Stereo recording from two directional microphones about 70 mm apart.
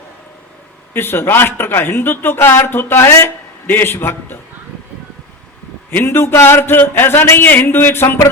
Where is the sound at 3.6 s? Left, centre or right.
Left.